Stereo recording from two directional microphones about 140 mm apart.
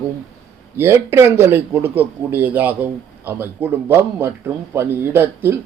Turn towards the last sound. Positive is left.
turn(degrees=-15)  # may be behind; listen again after turning